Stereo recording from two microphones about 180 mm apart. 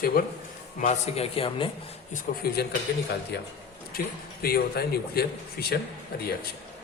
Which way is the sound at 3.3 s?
70° left (ahead or behind).